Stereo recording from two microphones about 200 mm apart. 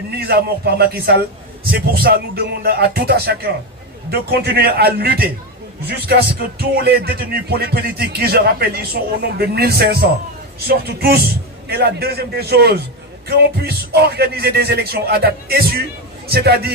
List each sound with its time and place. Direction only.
0.2 s speech: 55° right (ahead or behind)